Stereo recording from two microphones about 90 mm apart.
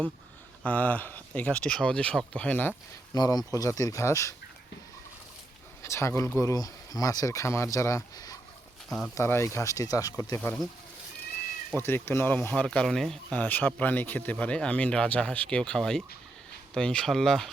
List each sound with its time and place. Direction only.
0.6 s speech: 15° left (ahead or behind)
3.2 s speech: 45° left (ahead or behind)
5.8 s speech: 30° left (ahead or behind)
9.1 s speech: 30° left (ahead or behind)
10.3 s speech: 25° left (ahead or behind)
11.8 s speech: 25° left (ahead or behind)
12.6 s speech: 5° left (ahead or behind)
13.3 s speech: 20° left (ahead or behind)